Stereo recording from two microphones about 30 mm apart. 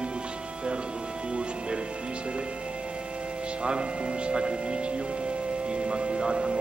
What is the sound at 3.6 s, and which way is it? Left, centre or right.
Speech, right.